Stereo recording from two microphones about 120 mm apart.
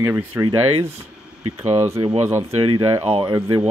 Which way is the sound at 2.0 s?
55° right (ahead or behind).